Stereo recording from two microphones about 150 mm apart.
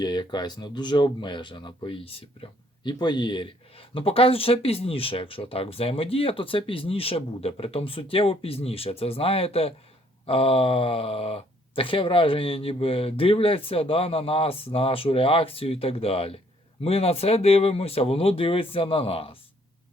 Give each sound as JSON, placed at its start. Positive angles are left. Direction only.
{"t": 0.0, "sound": "speech", "side_deg": 30}